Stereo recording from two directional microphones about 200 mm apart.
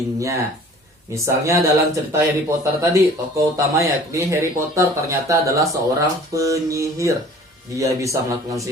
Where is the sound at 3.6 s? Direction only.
15° right (ahead or behind).